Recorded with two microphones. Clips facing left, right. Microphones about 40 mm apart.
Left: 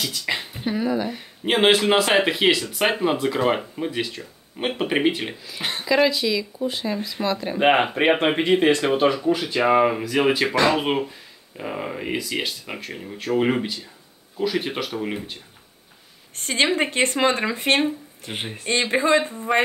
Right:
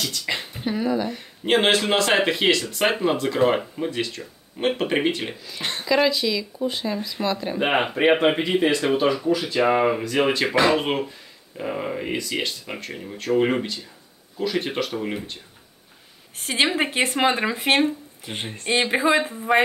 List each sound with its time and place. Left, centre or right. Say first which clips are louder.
0.0 s speech: left 1 dB; centre
7.5 s speech: left 6 dB; left
9.5 s speech: left 2 dB; centre
16.3 s speech: left 1 dB; centre
18.3 s speech: left 1 dB; centre
18.7 s speech: even; centre